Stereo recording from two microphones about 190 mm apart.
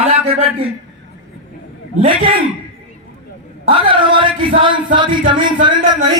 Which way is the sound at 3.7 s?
25° right (ahead or behind).